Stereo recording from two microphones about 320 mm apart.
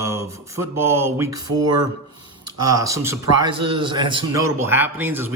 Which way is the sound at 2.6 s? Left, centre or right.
Centre.